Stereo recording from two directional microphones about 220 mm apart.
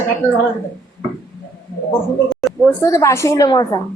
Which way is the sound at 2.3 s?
Centre (ahead or behind).